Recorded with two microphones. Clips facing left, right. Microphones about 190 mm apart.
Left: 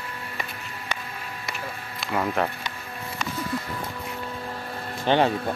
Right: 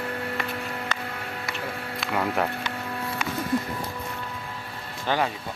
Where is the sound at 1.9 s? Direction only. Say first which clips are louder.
Left 1 dB; 5° right (ahead or behind).